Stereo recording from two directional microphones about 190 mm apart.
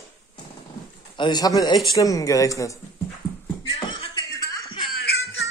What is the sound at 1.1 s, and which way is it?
A man's voice, 20° left (ahead or behind).